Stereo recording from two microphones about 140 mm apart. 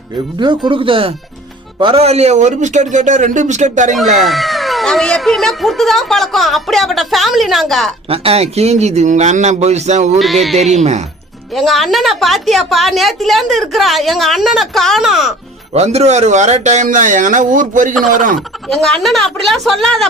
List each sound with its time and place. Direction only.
0.3 s speech: 35° right (ahead or behind); by 3.9 s 60° right (ahead or behind)
4.2 s speech: centre (ahead or behind)
8.1 s speech: 45° right (ahead or behind)
11.5 s speech: centre (ahead or behind)
15.7 s a man's voice: 50° right (ahead or behind); by 18.3 s 75° right (ahead or behind)
18.3 s speech: 5° left (ahead or behind)